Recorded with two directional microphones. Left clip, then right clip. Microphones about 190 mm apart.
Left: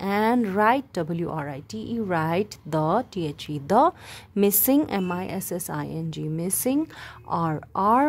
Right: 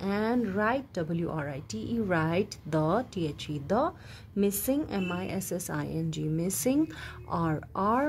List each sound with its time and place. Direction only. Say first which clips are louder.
0.0 s a woman's voice: left 7 dB; 40° left (ahead or behind)